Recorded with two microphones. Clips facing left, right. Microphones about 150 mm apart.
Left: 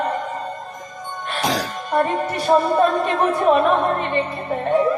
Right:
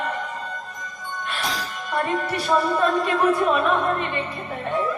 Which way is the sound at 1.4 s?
80° left.